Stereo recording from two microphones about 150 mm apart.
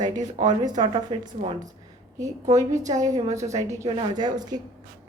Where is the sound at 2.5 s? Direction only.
20° right (ahead or behind).